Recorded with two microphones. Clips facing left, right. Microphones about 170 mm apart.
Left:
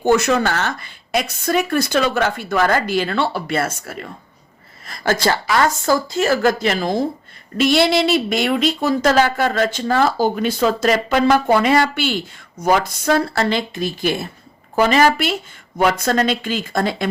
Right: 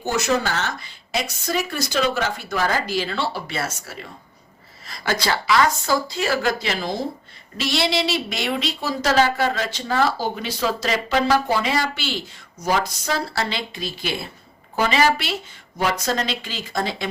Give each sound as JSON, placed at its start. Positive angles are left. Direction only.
{"t": 0.0, "sound": "speech", "side_deg": 55}